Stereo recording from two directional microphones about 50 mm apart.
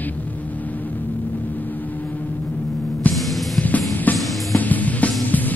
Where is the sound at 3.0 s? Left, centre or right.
Left.